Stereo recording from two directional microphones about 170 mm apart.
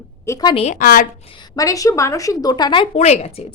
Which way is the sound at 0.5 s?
40° left (ahead or behind).